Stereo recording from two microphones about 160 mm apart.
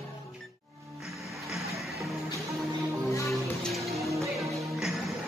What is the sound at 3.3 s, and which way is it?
Music, centre (ahead or behind).